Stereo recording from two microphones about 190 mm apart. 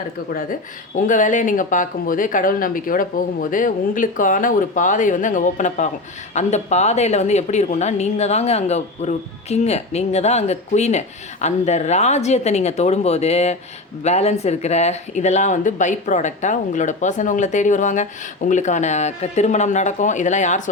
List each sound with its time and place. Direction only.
0.9 s speech: 40° left (ahead or behind)